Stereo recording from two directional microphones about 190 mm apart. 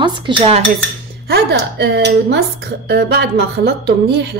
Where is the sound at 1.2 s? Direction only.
60° right (ahead or behind).